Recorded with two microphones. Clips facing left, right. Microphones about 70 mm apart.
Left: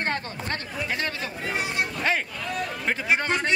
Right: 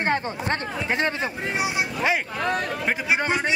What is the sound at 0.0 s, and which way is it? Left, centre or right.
A man's voice, right.